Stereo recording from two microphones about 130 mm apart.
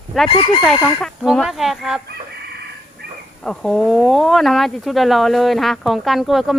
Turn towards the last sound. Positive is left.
turn(degrees=0)  # may be behind; listen again after turning